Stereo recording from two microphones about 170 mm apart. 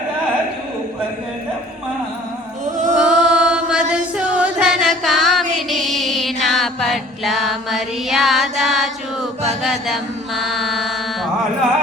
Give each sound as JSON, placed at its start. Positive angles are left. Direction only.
{"t": 2.7, "sound": "chant", "side_deg": -45}
{"t": 3.0, "sound": "music", "side_deg": -5}
{"t": 9.6, "sound": "mantra", "side_deg": 0}